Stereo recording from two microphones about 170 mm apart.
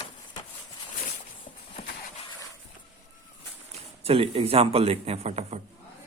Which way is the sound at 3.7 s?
35° right (ahead or behind).